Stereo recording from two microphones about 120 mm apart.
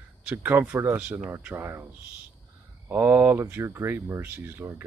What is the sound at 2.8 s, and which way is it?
Speech, 15° right (ahead or behind).